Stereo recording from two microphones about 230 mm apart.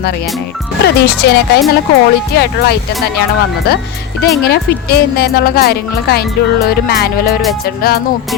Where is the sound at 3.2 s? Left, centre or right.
Left.